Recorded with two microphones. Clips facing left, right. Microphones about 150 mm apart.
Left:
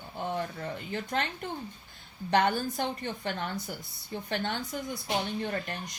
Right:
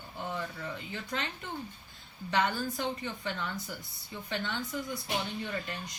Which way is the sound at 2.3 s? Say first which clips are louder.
Left 4 dB; 55° left (ahead or behind).